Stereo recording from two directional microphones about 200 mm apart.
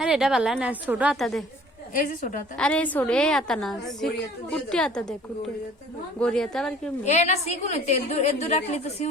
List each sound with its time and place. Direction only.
0.0 s a woman's voice: 5° right (ahead or behind)
2.0 s a woman's voice: 40° left (ahead or behind)
2.6 s a woman's voice: 5° left (ahead or behind)
6.1 s a woman's voice: 5° left (ahead or behind)
7.0 s a woman's voice: 35° left (ahead or behind)